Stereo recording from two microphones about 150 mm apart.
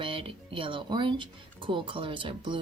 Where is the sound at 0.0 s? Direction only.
35° right (ahead or behind).